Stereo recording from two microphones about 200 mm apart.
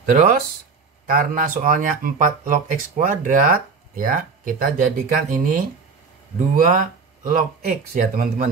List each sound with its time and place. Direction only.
0.0 s speech: 45° right (ahead or behind)
6.6 s speech: 45° right (ahead or behind)